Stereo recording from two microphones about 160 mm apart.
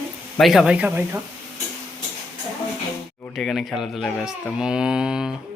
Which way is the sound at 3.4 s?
Centre (ahead or behind).